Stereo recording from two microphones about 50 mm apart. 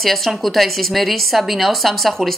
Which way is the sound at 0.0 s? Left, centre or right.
Centre.